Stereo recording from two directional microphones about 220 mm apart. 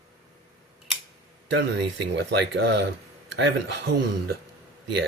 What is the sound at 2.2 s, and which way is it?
Speech, 50° right (ahead or behind).